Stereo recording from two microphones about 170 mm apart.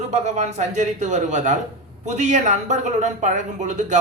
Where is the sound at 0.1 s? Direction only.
40° right (ahead or behind).